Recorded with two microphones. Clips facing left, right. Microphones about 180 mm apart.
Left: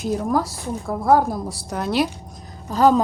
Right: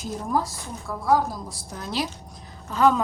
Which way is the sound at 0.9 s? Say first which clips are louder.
Left 5 dB; 55° left (ahead or behind).